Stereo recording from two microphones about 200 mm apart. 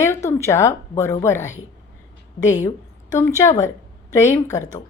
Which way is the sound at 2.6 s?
15° left (ahead or behind).